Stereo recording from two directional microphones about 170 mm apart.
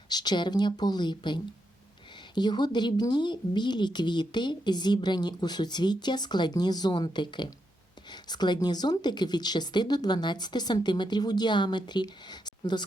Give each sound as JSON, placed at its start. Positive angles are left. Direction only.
{"t": 0.1, "sound": "a woman's voice", "side_deg": 25}